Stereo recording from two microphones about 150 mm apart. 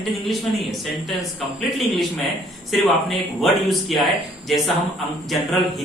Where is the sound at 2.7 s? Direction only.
Centre (ahead or behind).